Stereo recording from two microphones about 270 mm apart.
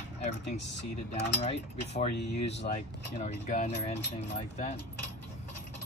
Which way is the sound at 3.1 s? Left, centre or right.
Left.